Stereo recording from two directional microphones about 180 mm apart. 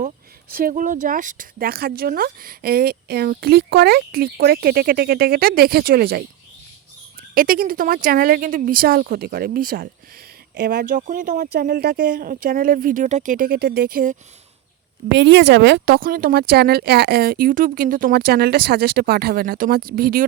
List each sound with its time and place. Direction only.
0.5 s speech: 50° right (ahead or behind)
7.3 s speech: 50° right (ahead or behind)
10.5 s speech: 65° right (ahead or behind); by 11.4 s 45° right (ahead or behind)
11.5 s speech: 60° right (ahead or behind)
15.1 s speech: 75° right (ahead or behind); by 20.2 s 55° right (ahead or behind)